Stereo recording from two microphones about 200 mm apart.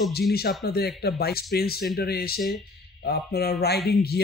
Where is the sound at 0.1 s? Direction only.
50° left (ahead or behind).